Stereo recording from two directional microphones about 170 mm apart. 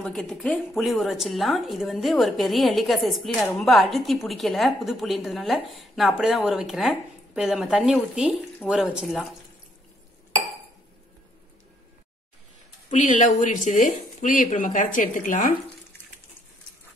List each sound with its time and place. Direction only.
0.0 s a woman's voice: centre (ahead or behind)
12.9 s speech: 45° left (ahead or behind)